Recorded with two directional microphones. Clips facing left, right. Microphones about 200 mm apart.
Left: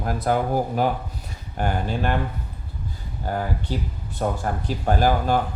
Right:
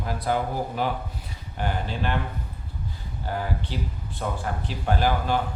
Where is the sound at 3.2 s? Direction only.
45° left (ahead or behind).